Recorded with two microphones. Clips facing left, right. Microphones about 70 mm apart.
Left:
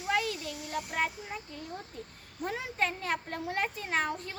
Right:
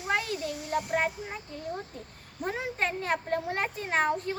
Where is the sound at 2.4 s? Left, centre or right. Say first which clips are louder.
Right 2 dB; right.